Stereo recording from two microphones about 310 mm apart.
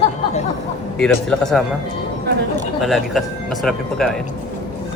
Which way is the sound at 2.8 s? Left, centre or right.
Centre.